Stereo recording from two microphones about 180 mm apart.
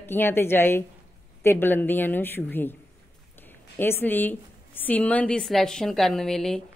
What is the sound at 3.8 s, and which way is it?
A woman's voice, 10° left (ahead or behind).